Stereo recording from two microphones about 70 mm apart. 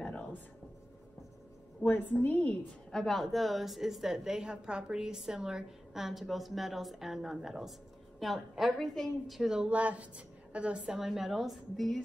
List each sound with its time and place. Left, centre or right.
0.0 s a sound: centre
1.9 s a woman's voice: left
2.9 s a woman's voice: centre
9.4 s a woman's voice: centre